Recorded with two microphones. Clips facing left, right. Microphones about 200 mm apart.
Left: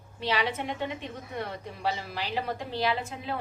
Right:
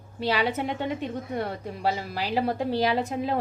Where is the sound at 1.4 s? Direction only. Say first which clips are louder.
Right 1 dB; 35° right (ahead or behind).